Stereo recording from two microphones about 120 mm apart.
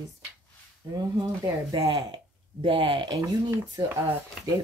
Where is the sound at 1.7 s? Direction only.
40° right (ahead or behind).